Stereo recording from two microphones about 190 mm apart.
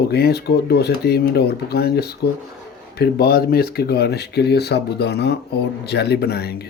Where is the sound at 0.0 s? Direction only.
55° left (ahead or behind).